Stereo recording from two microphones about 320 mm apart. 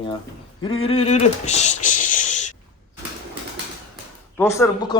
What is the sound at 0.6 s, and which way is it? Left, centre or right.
Speech, centre.